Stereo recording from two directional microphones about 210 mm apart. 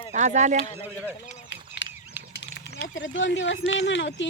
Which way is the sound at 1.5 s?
55° left (ahead or behind).